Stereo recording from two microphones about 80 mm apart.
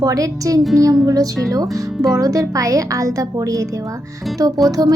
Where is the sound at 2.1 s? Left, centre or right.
Right.